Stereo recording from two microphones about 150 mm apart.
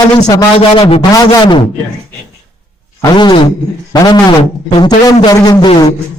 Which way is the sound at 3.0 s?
30° left (ahead or behind).